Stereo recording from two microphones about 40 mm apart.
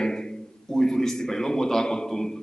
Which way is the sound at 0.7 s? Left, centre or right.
Centre.